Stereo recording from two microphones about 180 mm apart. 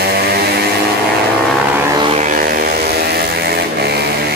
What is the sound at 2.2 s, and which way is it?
Vehicle, 50° right (ahead or behind).